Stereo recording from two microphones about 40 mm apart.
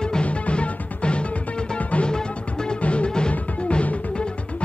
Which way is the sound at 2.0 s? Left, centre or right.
Left.